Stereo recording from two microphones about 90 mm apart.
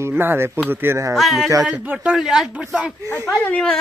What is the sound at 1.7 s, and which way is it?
Speech, 15° right (ahead or behind).